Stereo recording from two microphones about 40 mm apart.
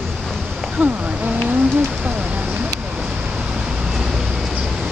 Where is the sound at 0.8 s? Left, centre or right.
Right.